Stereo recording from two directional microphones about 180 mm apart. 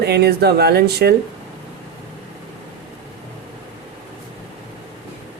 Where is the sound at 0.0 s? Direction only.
65° right (ahead or behind).